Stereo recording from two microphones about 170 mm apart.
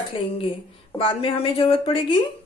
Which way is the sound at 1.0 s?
35° left (ahead or behind).